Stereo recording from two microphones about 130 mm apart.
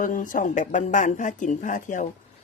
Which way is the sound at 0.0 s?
90° left.